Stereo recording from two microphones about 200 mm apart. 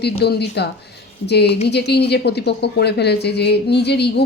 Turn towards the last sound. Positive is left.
turn(degrees=55)  # may be behind; listen again after turning